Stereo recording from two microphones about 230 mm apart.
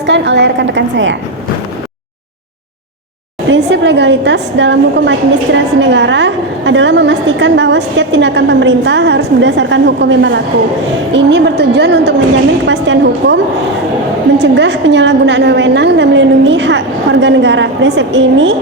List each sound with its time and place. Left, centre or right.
0.0 s a woman's voice: right
3.5 s a woman's voice: right